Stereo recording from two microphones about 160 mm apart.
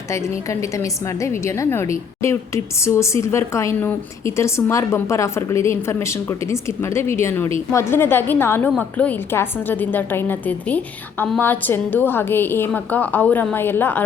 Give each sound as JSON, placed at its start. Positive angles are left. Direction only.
{"t": 0.1, "sound": "a woman's voice", "side_deg": 20}